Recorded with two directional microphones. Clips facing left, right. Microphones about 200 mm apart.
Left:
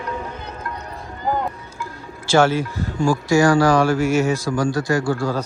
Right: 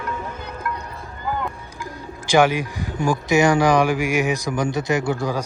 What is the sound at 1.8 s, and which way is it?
Speech, 15° right (ahead or behind).